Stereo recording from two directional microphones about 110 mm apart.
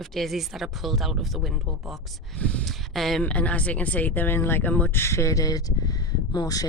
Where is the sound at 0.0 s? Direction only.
Centre (ahead or behind).